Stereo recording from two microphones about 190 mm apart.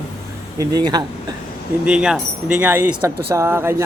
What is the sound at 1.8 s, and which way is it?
Speech, 5° right (ahead or behind).